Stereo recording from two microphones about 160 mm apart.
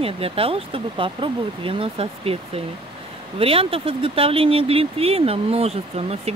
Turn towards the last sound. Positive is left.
turn(degrees=-40)  # may be behind; listen again after turning